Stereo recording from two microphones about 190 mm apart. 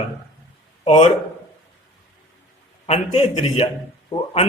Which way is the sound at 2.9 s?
35° left (ahead or behind).